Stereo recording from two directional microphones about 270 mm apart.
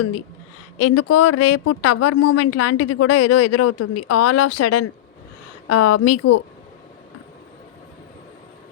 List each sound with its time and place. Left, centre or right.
0.8 s speech: left